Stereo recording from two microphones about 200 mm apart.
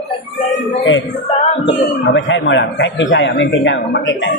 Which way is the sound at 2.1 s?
65° left (ahead or behind).